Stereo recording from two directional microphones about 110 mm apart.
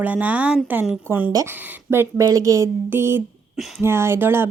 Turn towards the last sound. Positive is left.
turn(degrees=-20)  # may be behind; listen again after turning